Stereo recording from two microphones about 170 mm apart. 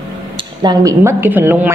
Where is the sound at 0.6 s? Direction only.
20° right (ahead or behind).